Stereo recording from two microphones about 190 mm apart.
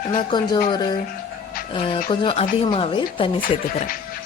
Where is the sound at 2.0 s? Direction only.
30° left (ahead or behind).